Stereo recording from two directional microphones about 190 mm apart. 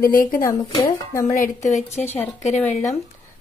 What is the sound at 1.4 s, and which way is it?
Speech, 40° left (ahead or behind).